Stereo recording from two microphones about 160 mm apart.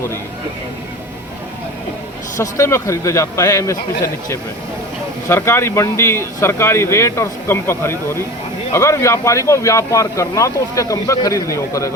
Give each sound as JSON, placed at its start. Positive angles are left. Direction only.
{"t": 2.4, "sound": "speech", "side_deg": 15}